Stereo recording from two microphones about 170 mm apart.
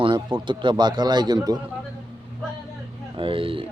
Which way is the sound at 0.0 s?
30° right (ahead or behind).